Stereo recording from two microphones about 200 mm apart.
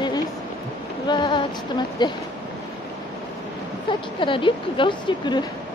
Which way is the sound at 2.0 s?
20° left (ahead or behind).